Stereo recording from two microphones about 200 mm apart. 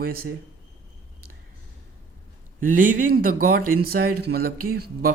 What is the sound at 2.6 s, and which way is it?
Speech, 45° right (ahead or behind).